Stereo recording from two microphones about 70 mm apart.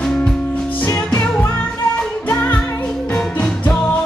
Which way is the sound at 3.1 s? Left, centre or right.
Centre.